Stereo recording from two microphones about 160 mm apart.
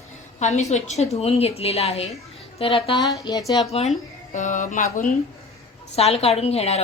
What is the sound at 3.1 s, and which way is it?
Speech, 25° left (ahead or behind).